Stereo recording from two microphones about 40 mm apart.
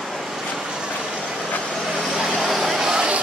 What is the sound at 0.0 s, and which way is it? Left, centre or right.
Vehicle, centre.